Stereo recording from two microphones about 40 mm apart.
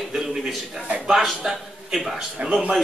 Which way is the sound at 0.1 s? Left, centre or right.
Centre.